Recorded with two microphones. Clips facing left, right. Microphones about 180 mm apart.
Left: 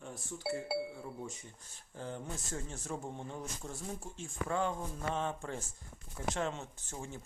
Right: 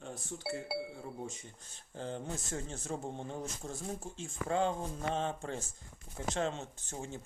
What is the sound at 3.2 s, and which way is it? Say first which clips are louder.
Speech: right 2 dB; 45° right (ahead or behind).